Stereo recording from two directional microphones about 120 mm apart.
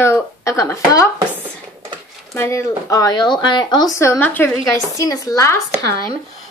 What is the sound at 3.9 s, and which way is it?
Speech, 25° left (ahead or behind).